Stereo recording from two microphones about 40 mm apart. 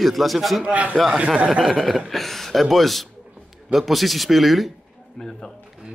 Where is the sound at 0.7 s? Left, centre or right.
Right.